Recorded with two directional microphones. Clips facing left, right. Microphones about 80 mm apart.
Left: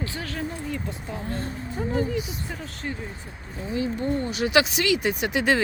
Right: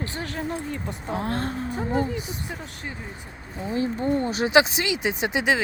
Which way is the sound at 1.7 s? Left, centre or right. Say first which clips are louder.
Left 2 dB; centre.